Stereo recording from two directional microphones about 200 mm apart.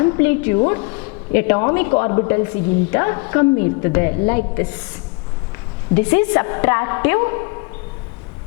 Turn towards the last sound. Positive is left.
turn(degrees=20)  # may be behind; listen again after turning